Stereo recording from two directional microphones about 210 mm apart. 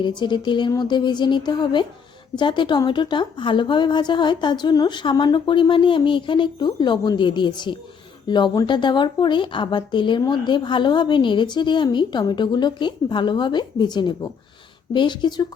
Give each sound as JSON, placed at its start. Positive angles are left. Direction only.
{"t": 0.0, "sound": "speech", "side_deg": 20}